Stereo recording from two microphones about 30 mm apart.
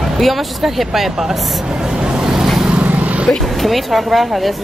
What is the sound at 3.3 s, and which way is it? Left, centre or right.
Speech, centre.